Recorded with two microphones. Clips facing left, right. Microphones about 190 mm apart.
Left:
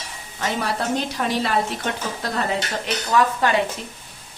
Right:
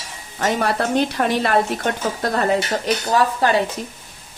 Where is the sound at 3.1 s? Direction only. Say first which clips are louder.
Right 1 dB; 35° right (ahead or behind).